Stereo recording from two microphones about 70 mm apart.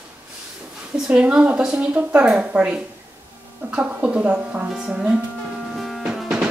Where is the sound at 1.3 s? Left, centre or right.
Centre.